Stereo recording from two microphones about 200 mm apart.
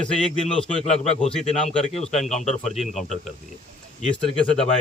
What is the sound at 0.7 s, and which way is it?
Speech, 35° left (ahead or behind).